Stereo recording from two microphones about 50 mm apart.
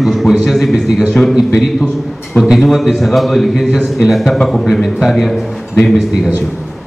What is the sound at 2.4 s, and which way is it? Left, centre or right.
A man's voice, centre.